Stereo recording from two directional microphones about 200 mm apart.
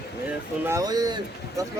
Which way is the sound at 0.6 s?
15° right (ahead or behind).